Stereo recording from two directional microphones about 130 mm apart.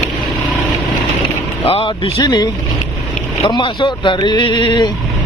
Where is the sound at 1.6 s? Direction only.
50° left (ahead or behind).